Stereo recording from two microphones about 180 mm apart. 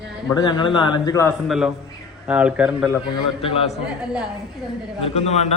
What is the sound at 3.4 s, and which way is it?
Speech, 35° left (ahead or behind).